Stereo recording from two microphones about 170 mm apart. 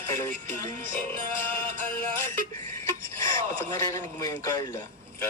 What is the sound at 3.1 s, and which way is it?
Speech, 20° left (ahead or behind).